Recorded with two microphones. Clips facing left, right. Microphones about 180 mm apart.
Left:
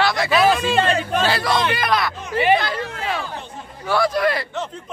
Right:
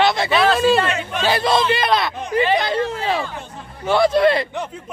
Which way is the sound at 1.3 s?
20° right (ahead or behind).